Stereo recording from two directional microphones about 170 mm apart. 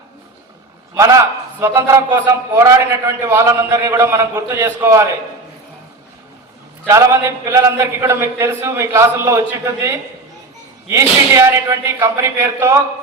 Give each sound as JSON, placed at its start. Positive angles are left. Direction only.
{"t": 0.9, "sound": "a man's voice", "side_deg": -20}
{"t": 6.8, "sound": "a man's voice", "side_deg": -15}